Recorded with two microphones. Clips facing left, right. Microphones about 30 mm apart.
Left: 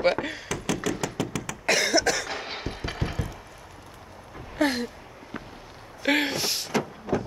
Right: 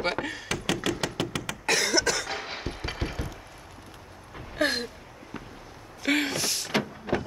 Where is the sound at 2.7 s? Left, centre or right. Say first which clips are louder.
Left 1 dB; right.